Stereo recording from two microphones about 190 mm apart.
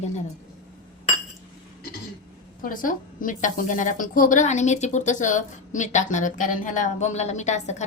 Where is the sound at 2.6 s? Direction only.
45° left (ahead or behind).